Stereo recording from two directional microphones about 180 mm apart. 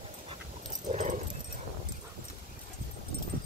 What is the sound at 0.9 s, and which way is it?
Dog, 40° right (ahead or behind).